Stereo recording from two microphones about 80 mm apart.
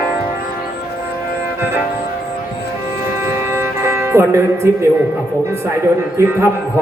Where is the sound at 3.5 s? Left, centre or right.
Right.